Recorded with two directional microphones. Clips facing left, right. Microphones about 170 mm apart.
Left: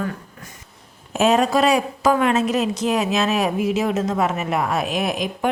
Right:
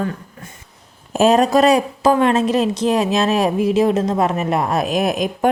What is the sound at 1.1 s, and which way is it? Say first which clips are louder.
A woman's voice: right 4 dB; 35° right (ahead or behind).